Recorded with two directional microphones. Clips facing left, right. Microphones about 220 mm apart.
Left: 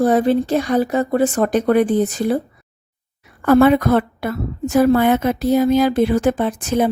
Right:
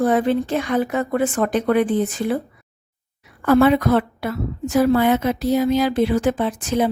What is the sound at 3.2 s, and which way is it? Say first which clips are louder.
A woman's voice: left 3 dB; 50° left (ahead or behind).